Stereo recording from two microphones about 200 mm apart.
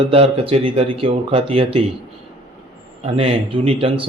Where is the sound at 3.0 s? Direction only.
30° right (ahead or behind).